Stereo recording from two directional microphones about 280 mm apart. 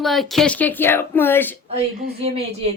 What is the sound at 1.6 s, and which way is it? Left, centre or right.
Speech, right.